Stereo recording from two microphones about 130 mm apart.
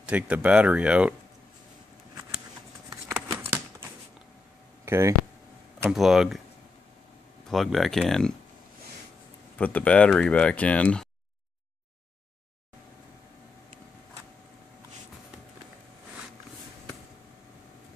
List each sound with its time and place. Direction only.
0.0 s speech: 10° right (ahead or behind)
3.3 s a sound: 20° right (ahead or behind)
4.8 s speech: 20° right (ahead or behind)
5.9 s speech: 5° right (ahead or behind)
7.4 s speech: centre (ahead or behind)
9.6 s speech: 10° left (ahead or behind)